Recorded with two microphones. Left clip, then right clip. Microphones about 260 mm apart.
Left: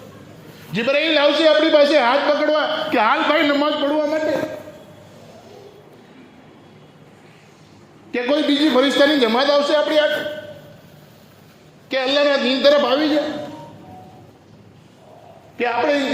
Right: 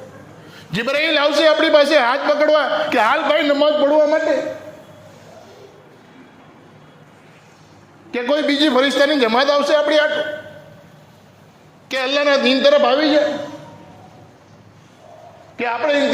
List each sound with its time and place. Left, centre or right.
0.7 s a man's voice: right
8.1 s a man's voice: right
11.9 s a man's voice: right
15.5 s a man's voice: right